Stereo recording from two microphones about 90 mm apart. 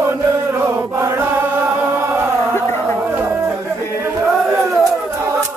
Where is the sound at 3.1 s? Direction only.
25° right (ahead or behind).